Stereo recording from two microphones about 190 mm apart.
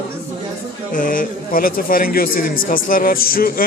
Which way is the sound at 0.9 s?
45° left (ahead or behind).